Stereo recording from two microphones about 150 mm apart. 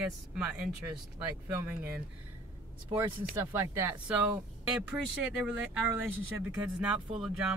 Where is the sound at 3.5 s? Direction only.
15° right (ahead or behind).